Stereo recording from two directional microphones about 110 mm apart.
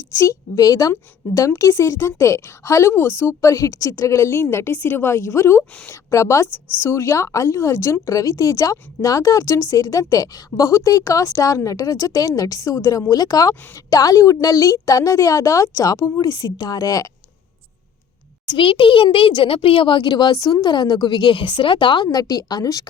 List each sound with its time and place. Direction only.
0.1 s a woman's voice: 25° left (ahead or behind)
18.4 s speech: 50° left (ahead or behind)